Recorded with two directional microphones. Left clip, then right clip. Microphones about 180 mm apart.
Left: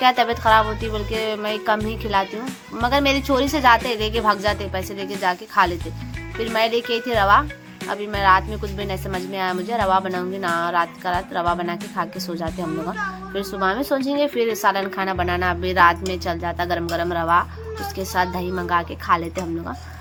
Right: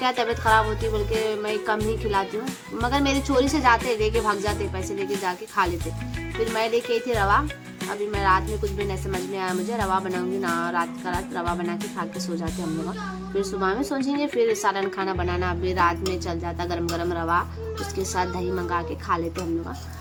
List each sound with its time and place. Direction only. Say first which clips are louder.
0.0 s a child's voice: left 6 dB; 15° left (ahead or behind)